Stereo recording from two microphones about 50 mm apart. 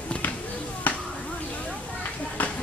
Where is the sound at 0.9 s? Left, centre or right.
Left.